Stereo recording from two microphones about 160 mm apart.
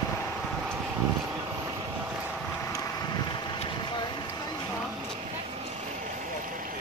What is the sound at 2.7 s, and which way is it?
Vehicle, 25° left (ahead or behind).